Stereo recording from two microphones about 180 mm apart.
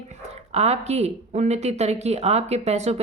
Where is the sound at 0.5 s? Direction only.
35° right (ahead or behind).